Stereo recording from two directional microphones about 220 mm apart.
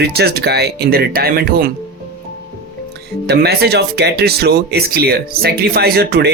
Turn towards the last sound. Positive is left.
turn(degrees=-45)  # may be behind; listen again after turning